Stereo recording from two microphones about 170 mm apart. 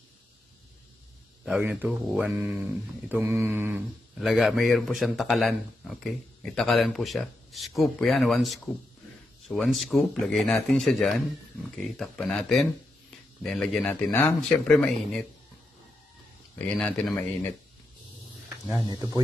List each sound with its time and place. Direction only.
1.4 s speech: 5° right (ahead or behind)
4.2 s speech: centre (ahead or behind)
16.5 s speech: 5° left (ahead or behind)
17.1 s speech: 15° left (ahead or behind)
18.9 s speech: 20° right (ahead or behind)